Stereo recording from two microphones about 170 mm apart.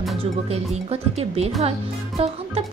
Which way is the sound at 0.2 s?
35° right (ahead or behind).